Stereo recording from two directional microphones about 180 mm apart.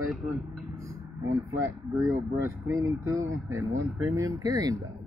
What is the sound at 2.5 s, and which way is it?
Speech, 15° right (ahead or behind).